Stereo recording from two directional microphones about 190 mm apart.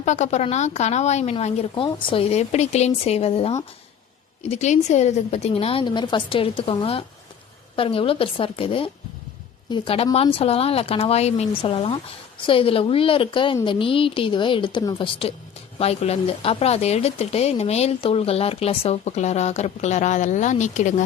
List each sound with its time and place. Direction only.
0.0 s a woman's voice: 40° left (ahead or behind)